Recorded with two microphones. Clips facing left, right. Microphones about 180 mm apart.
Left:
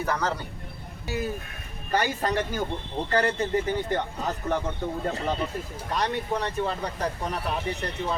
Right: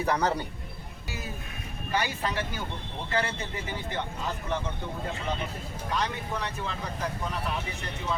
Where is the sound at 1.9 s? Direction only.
45° left (ahead or behind).